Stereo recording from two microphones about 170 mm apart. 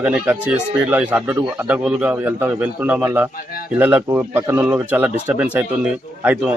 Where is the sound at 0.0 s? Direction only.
5° right (ahead or behind).